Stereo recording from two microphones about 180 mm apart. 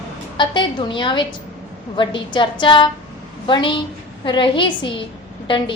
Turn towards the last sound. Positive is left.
turn(degrees=30)  # may be behind; listen again after turning